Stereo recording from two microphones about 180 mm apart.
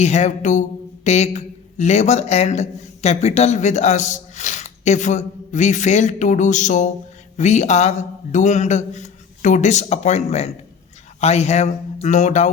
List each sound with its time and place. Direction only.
0.0 s a man's voice: 40° left (ahead or behind)